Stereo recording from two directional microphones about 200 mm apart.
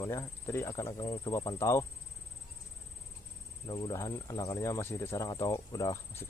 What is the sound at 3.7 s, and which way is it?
Speech, 20° left (ahead or behind).